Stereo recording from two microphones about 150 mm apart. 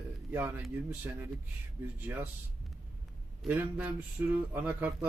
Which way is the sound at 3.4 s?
10° right (ahead or behind).